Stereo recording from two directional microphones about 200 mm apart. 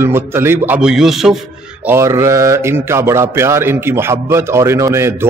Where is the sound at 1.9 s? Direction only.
15° right (ahead or behind).